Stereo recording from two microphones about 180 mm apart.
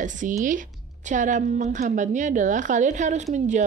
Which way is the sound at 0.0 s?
45° right (ahead or behind).